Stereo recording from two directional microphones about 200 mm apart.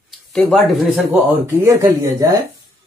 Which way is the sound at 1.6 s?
15° right (ahead or behind).